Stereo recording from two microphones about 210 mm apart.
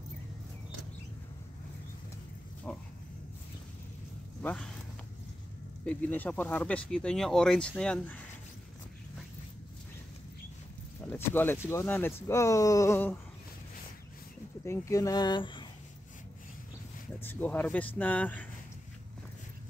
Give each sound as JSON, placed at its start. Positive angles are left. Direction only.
{"t": 4.4, "sound": "speech", "side_deg": 10}
{"t": 5.9, "sound": "speech", "side_deg": 10}
{"t": 11.1, "sound": "speech", "side_deg": 10}
{"t": 14.6, "sound": "speech", "side_deg": 15}
{"t": 17.2, "sound": "speech", "side_deg": 10}